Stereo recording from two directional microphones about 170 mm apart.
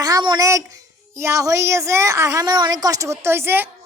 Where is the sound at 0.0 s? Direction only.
25° right (ahead or behind).